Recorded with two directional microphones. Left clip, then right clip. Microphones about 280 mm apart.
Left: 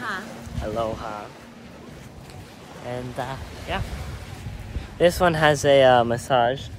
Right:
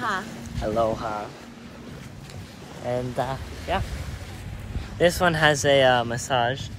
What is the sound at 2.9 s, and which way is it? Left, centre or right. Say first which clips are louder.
Speech: right 4 dB; centre.